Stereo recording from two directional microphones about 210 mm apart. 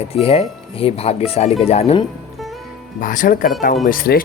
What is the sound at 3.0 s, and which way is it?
Speech, 40° left (ahead or behind).